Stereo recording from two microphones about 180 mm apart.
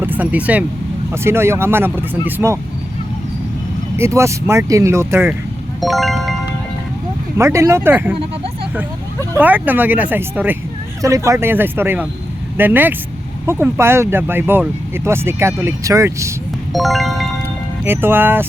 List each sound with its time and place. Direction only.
0.0 s speech: 10° right (ahead or behind)
3.9 s speech: 15° right (ahead or behind)
5.8 s music: centre (ahead or behind)
7.3 s speech: 15° right (ahead or behind)
9.3 s speech: 10° right (ahead or behind)
16.7 s music: centre (ahead or behind)
17.8 s speech: 10° right (ahead or behind)